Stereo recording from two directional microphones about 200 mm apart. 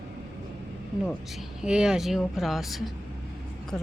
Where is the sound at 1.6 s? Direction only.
5° right (ahead or behind).